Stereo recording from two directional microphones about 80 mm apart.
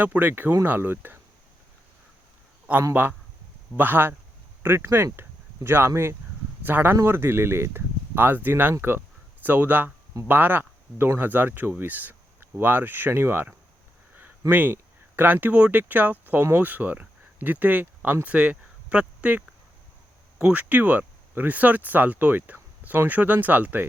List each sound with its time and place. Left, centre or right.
0.0 s speech: right
2.9 s speech: right
14.5 s speech: right
20.4 s speech: centre